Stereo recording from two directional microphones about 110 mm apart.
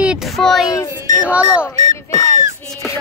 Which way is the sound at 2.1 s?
30° left (ahead or behind).